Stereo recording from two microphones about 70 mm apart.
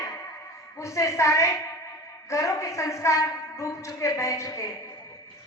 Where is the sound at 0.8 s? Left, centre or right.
Left.